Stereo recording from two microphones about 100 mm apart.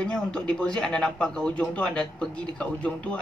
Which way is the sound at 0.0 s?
10° left (ahead or behind).